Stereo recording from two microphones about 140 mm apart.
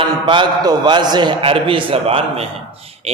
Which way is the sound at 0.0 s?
35° right (ahead or behind).